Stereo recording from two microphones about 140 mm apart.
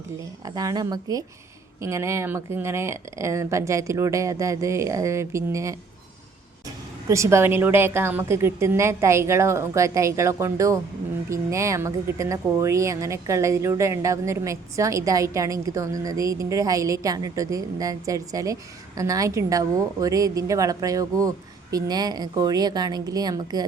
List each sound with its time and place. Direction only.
0.4 s speech: 25° right (ahead or behind)
7.1 s speech: 20° right (ahead or behind)